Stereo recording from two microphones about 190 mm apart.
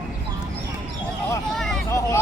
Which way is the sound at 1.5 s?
Centre (ahead or behind).